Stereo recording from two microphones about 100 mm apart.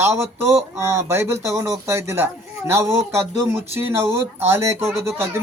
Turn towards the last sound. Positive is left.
turn(degrees=-25)  # may be behind; listen again after turning